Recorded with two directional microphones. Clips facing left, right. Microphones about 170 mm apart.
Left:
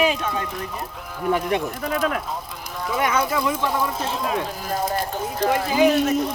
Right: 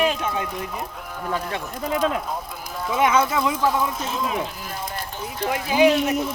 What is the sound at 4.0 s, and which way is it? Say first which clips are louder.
Speech: left 1 dB; 35° left (ahead or behind).